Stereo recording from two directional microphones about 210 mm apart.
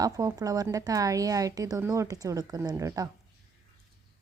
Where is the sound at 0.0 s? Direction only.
15° right (ahead or behind).